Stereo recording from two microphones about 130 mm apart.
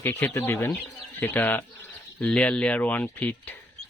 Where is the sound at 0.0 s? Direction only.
15° left (ahead or behind).